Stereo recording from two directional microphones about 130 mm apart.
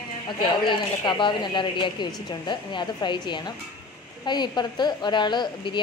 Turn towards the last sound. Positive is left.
turn(degrees=35)  # may be behind; listen again after turning